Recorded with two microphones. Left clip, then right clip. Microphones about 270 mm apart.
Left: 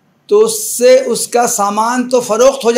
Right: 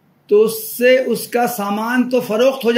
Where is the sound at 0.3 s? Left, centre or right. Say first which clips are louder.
Left 3 dB; centre.